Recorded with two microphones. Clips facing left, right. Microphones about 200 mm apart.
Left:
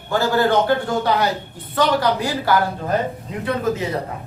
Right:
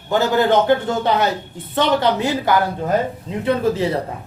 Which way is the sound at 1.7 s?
25° right (ahead or behind).